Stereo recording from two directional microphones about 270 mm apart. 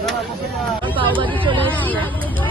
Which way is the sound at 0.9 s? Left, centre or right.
Centre.